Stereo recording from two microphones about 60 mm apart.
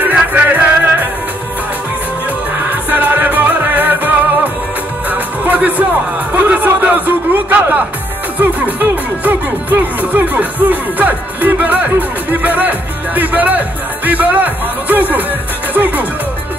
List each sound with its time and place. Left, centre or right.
0.0 s music: right
2.7 s music: right
8.4 s speech: right